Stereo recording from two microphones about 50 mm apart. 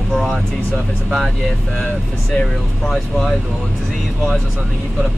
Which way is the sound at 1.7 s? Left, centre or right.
Left.